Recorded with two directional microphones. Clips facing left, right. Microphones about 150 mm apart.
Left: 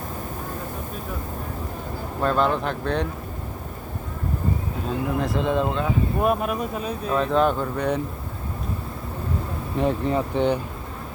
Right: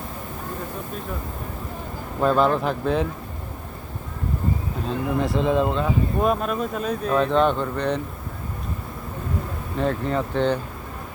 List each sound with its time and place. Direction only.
2.2 s speech: centre (ahead or behind)
4.9 s speech: centre (ahead or behind)
6.3 s speech: 10° left (ahead or behind)
9.7 s speech: 15° left (ahead or behind)